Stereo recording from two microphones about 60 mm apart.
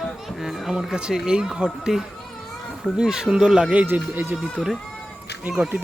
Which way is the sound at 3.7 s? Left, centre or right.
Right.